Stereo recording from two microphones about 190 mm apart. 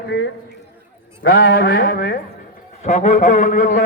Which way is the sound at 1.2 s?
55° left (ahead or behind).